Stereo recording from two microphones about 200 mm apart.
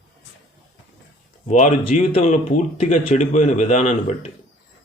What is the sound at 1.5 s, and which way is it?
Speech, 35° left (ahead or behind).